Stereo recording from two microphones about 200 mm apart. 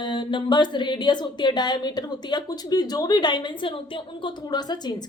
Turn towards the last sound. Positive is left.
turn(degrees=20)  # may be behind; listen again after turning